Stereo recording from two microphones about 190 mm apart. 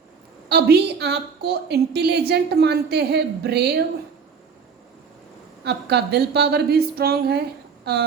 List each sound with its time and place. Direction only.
0.4 s a woman's voice: 60° right (ahead or behind)
5.6 s a woman's voice: 60° right (ahead or behind)